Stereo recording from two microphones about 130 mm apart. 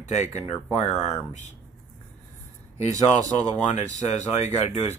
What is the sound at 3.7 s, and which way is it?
Speech, 60° left (ahead or behind).